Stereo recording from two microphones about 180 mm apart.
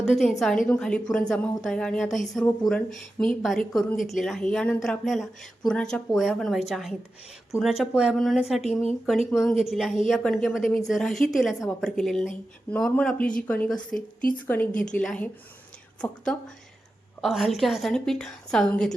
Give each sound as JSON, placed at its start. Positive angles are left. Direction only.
{"t": 0.2, "sound": "a woman's voice", "side_deg": 0}
{"t": 14.2, "sound": "speech", "side_deg": 50}
{"t": 14.4, "sound": "a woman's voice", "side_deg": 10}
{"t": 14.7, "sound": "speech", "side_deg": 45}
{"t": 14.9, "sound": "a woman's voice", "side_deg": 5}